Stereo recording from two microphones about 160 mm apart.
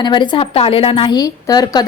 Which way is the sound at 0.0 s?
30° left (ahead or behind).